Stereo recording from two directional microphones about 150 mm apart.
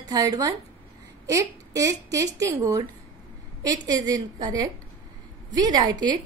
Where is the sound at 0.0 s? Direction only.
25° right (ahead or behind).